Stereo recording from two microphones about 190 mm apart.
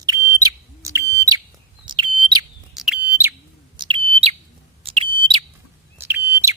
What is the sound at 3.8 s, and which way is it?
Bird, 30° right (ahead or behind).